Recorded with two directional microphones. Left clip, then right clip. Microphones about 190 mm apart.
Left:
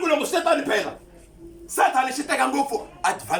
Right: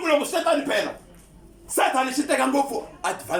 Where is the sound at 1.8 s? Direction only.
10° right (ahead or behind).